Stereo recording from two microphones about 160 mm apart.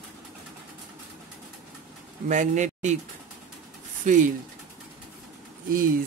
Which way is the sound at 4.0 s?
50° right (ahead or behind).